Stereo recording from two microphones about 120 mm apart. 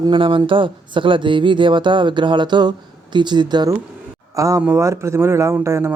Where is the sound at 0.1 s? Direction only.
45° right (ahead or behind).